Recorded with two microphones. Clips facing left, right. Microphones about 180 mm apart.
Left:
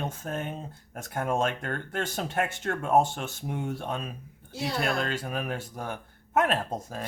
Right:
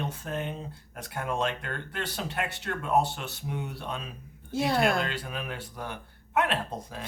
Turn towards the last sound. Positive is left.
turn(degrees=45)  # may be behind; listen again after turning